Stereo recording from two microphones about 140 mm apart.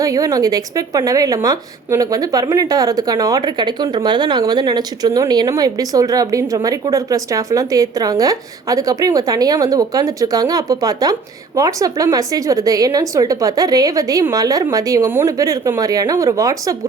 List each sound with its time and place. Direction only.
0.0 s a woman's voice: 25° right (ahead or behind)